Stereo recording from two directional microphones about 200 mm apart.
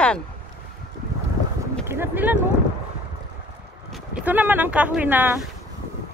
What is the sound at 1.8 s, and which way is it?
Speech, 10° right (ahead or behind).